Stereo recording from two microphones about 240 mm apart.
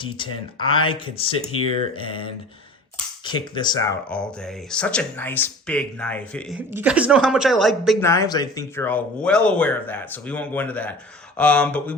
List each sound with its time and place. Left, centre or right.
0.0 s speech: centre
3.2 s speech: centre
4.2 s speech: centre
6.6 s speech: centre
8.0 s speech: centre